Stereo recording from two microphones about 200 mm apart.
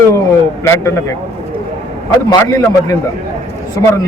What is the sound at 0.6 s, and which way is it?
Speech, 15° left (ahead or behind).